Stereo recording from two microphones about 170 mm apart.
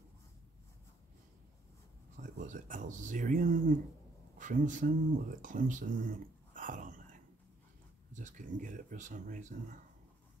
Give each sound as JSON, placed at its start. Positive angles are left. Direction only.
{"t": 2.3, "sound": "speech", "side_deg": -45}
{"t": 5.4, "sound": "whispering", "side_deg": -50}
{"t": 8.1, "sound": "speech", "side_deg": -50}